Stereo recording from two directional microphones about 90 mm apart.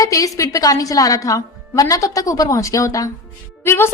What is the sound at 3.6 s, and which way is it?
Speech, 25° left (ahead or behind).